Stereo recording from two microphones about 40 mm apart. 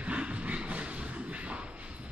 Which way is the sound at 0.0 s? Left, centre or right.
Right.